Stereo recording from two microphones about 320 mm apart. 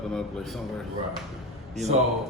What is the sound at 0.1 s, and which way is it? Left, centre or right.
Speech, centre.